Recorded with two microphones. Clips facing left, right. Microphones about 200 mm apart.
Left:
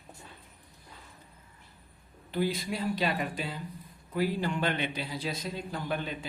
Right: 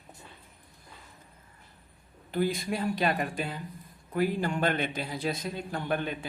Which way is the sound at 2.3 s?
50° right (ahead or behind).